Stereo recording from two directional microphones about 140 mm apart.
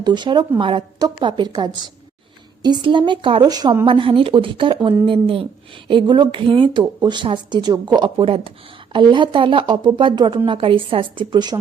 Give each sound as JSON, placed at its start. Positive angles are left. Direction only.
{"t": 0.0, "sound": "a woman's voice", "side_deg": -30}
{"t": 3.8, "sound": "speech", "side_deg": -40}